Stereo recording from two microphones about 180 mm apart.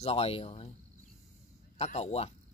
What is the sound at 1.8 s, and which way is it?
Speech, 35° left (ahead or behind).